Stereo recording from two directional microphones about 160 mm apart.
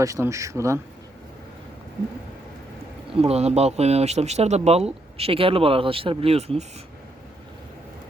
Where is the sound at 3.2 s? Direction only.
40° right (ahead or behind).